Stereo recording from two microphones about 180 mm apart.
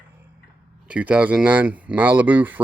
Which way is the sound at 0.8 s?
5° right (ahead or behind).